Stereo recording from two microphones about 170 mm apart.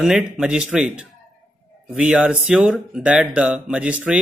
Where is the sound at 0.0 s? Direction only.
5° right (ahead or behind).